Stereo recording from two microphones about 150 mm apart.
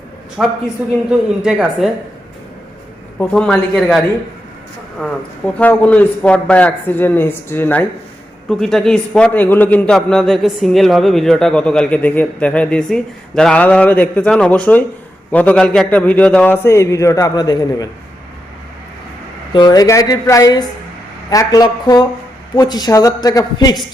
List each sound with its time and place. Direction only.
0.4 s a man's voice: 5° right (ahead or behind)
3.2 s a man's voice: 10° left (ahead or behind)
5.5 s a man's voice: 10° left (ahead or behind)
16.6 s a woman's voice: 20° left (ahead or behind)
19.5 s a woman's voice: 25° left (ahead or behind)